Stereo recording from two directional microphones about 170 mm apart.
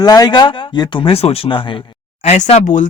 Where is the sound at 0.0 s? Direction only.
25° left (ahead or behind).